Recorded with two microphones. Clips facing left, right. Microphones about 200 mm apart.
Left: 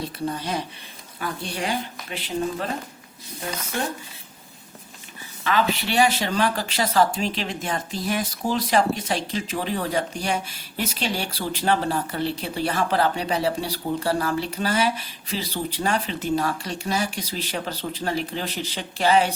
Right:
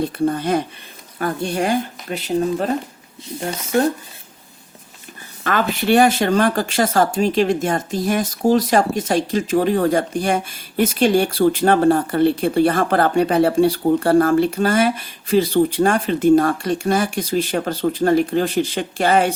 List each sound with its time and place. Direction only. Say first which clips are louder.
0.0 s speech: right 9 dB; 55° right (ahead or behind)
5.4 s speech: right 2 dB; 50° right (ahead or behind)